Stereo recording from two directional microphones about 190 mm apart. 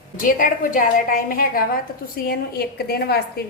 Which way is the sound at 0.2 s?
45° left (ahead or behind).